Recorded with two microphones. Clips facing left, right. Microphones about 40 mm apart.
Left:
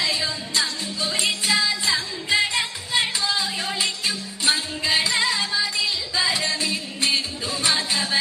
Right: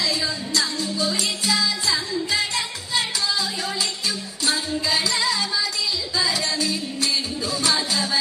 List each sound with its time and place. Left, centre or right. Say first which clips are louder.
0.0 s music: even; left